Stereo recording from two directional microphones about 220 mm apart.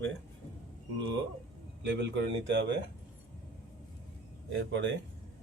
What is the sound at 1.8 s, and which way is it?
Speech, 50° right (ahead or behind).